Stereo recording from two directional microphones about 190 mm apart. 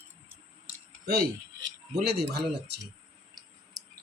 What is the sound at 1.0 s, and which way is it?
Speech, 55° right (ahead or behind).